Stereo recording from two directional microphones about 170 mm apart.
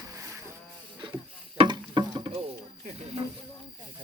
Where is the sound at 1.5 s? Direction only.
25° right (ahead or behind).